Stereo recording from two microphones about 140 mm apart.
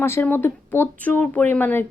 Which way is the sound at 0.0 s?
15° left (ahead or behind).